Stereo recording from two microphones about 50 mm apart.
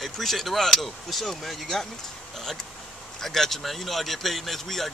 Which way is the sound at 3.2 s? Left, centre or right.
Centre.